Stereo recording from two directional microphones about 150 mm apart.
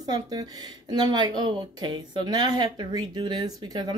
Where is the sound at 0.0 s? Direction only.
25° right (ahead or behind).